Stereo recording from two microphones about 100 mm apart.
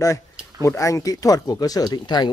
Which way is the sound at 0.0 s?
30° left (ahead or behind).